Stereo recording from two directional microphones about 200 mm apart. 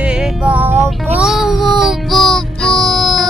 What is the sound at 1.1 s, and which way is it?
Child singing, centre (ahead or behind).